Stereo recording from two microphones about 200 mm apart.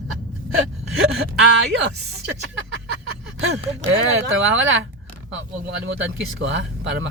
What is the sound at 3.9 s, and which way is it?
Speech, 75° right (ahead or behind).